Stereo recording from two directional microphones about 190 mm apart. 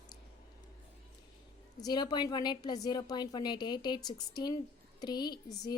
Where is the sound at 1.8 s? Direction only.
20° left (ahead or behind).